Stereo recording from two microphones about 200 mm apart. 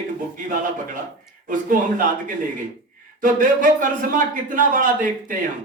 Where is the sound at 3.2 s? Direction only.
45° right (ahead or behind).